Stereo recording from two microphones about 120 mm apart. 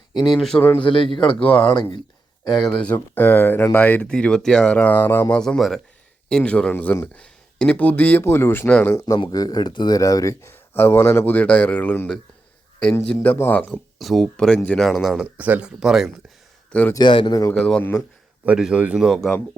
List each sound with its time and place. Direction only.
0.3 s speech: centre (ahead or behind)
0.8 s a man's voice: 45° left (ahead or behind)
1.7 s speech: 40° left (ahead or behind)
2.5 s speech: centre (ahead or behind); by 5.4 s 20° left (ahead or behind)
5.4 s speech: 5° left (ahead or behind)
9.1 s speech: 35° left (ahead or behind); by 13.7 s 15° left (ahead or behind)
13.7 s speech: centre (ahead or behind)
15.4 s speech: 15° right (ahead or behind)
16.9 s speech: 45° left (ahead or behind)
17.5 s speech: 5° left (ahead or behind)
18.4 s speech: 10° right (ahead or behind)